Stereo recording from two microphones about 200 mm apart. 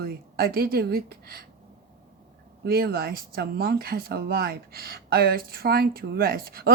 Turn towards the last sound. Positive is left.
turn(degrees=-50)  # may be behind; listen again after turning